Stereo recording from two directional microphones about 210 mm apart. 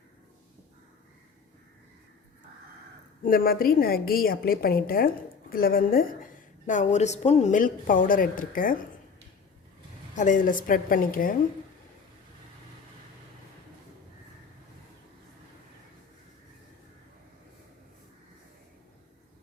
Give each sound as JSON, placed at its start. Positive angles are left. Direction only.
{"t": 3.2, "sound": "a woman's voice", "side_deg": 45}
{"t": 10.2, "sound": "speech", "side_deg": 35}